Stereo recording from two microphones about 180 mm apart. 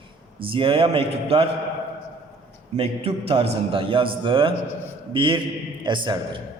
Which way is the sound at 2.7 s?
35° right (ahead or behind).